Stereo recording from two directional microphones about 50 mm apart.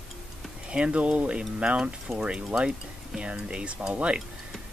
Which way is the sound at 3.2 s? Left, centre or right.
Right.